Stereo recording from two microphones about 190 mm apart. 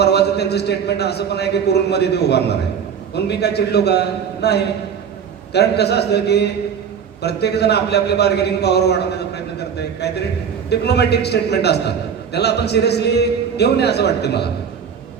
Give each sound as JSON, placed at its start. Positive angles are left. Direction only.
{"t": 0.0, "sound": "a man's voice", "side_deg": 60}